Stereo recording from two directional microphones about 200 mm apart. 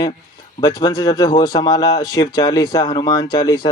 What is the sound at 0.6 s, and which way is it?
Speech, 20° left (ahead or behind).